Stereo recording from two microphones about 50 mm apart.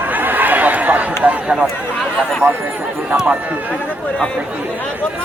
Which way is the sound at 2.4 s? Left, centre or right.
Right.